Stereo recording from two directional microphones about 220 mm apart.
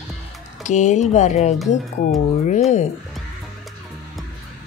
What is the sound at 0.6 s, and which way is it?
Speech, 35° left (ahead or behind).